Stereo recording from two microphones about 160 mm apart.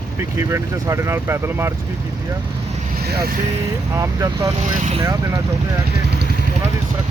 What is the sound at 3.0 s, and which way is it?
Speech, 75° right (ahead or behind).